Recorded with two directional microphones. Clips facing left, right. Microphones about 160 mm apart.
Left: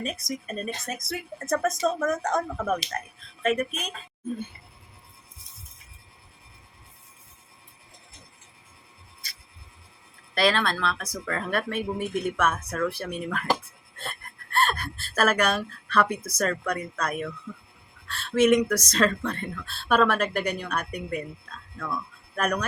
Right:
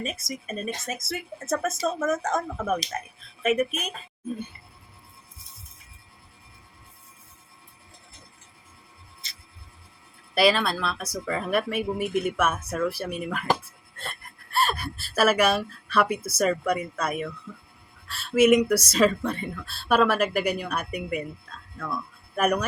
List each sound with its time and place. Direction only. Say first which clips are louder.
0.0 s speech: left 1 dB; centre (ahead or behind)
9.2 s music: left 2 dB; 25° right (ahead or behind)
10.3 s speech: right 2 dB; 5° right (ahead or behind)